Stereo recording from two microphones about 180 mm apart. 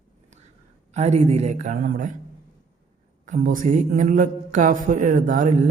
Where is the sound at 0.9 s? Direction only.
40° right (ahead or behind).